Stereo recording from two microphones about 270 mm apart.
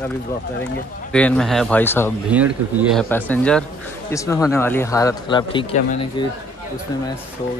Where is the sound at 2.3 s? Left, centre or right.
Centre.